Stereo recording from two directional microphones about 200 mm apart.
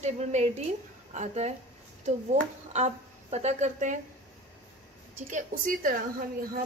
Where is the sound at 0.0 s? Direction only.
35° right (ahead or behind).